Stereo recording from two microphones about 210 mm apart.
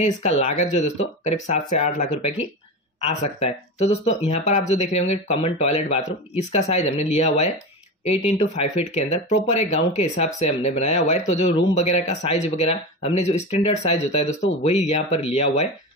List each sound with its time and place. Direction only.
0.0 s speech: 35° left (ahead or behind)